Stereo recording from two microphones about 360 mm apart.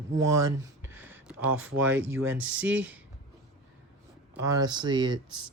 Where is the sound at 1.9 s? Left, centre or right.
Right.